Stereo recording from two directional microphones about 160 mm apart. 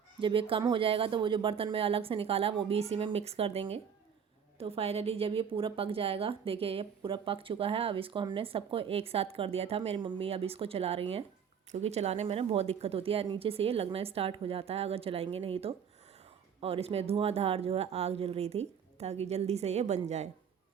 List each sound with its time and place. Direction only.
0.2 s a woman's voice: 30° right (ahead or behind)